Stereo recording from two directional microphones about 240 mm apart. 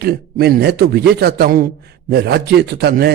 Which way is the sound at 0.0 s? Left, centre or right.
Right.